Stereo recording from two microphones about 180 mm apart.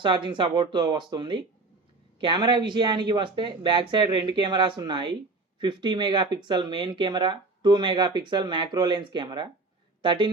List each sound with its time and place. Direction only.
0.0 s speech: 25° right (ahead or behind)